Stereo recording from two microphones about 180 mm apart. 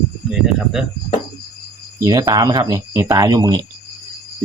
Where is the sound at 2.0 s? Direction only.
20° right (ahead or behind).